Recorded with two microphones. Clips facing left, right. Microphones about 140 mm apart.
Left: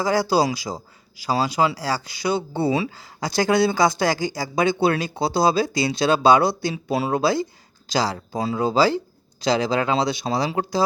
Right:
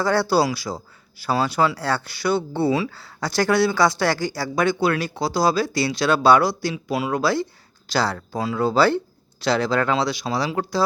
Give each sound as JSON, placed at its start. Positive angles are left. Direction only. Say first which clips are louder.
{"t": 0.0, "sound": "speech", "louder": "even", "side_deg": 10}
{"t": 7.9, "sound": "speech", "louder": "even", "side_deg": 10}
{"t": 9.9, "sound": "speech", "louder": "left 1 dB", "side_deg": 25}